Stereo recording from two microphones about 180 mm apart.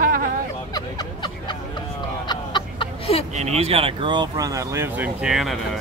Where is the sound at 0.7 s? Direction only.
25° left (ahead or behind).